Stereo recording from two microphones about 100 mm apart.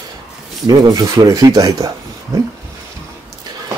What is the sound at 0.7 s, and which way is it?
Speech, 40° right (ahead or behind).